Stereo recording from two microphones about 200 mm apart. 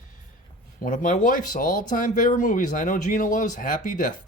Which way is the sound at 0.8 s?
40° left (ahead or behind).